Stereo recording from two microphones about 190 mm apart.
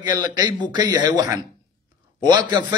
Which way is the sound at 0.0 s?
20° right (ahead or behind).